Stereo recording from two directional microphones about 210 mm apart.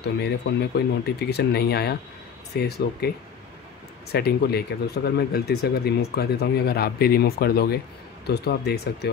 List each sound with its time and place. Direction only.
0.2 s speech: 50° left (ahead or behind)
4.1 s speech: 50° left (ahead or behind)